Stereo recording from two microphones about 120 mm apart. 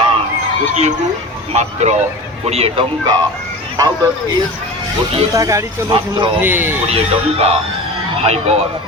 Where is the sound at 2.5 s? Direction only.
55° right (ahead or behind).